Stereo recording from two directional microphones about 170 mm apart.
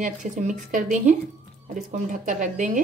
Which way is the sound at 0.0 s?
45° right (ahead or behind).